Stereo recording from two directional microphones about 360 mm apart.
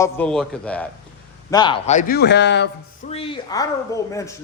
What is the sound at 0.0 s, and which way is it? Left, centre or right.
A man's voice, centre.